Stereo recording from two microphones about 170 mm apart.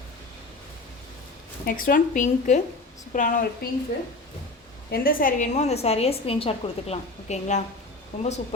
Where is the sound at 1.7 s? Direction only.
55° left (ahead or behind).